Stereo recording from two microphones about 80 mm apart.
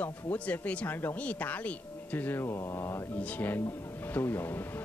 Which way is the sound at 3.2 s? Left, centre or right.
Centre.